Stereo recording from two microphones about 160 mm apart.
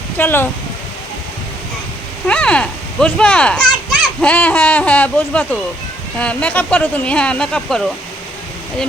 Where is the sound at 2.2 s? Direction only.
5° left (ahead or behind).